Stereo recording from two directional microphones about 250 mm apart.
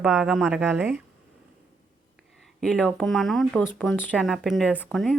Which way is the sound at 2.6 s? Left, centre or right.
Centre.